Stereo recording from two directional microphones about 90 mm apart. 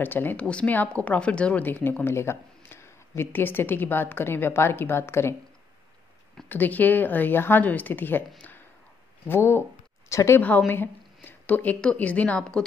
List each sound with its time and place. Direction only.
0.0 s a woman's voice: 20° left (ahead or behind)
6.5 s a woman's voice: 20° left (ahead or behind)
8.4 s a sound: 20° left (ahead or behind)
9.3 s a woman's voice: 30° left (ahead or behind); by 12.6 s 10° left (ahead or behind)